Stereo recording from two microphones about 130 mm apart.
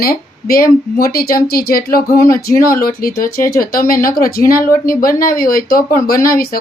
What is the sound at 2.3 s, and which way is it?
Speech, 90° left.